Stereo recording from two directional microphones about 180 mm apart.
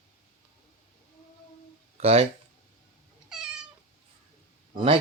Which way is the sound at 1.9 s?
35° right (ahead or behind).